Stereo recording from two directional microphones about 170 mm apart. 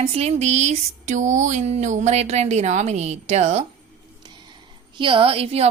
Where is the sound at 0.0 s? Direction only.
35° right (ahead or behind).